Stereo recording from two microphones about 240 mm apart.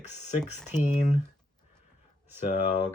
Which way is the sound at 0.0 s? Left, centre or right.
Left.